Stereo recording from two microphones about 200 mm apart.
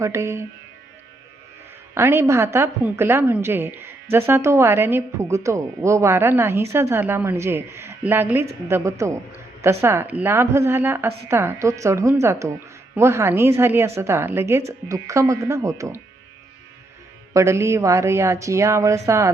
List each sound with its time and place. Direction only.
0.0 s a woman's voice: 15° right (ahead or behind)
2.0 s a woman's voice: 15° right (ahead or behind)
17.3 s a woman's voice: 15° right (ahead or behind)